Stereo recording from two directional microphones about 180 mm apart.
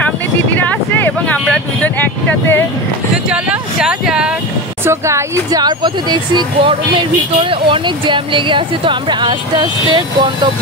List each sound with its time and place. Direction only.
0.6 s a sound: 10° left (ahead or behind)
1.4 s speech: 5° left (ahead or behind)
3.3 s speech: 5° right (ahead or behind)
4.8 s speech: 15° right (ahead or behind)